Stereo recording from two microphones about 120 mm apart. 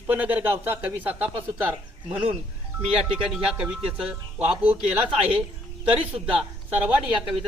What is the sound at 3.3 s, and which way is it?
Speech, 10° right (ahead or behind).